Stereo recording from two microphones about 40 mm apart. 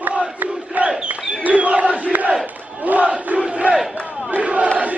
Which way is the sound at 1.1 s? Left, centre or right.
Right.